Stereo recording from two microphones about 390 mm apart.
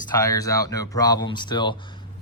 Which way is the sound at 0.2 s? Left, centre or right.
Centre.